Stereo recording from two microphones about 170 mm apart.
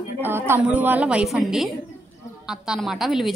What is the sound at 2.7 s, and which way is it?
Speech, centre (ahead or behind).